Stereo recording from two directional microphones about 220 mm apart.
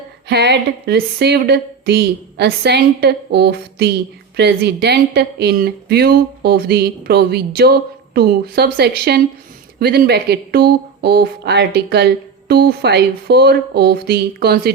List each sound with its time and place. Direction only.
0.3 s speech: 50° right (ahead or behind)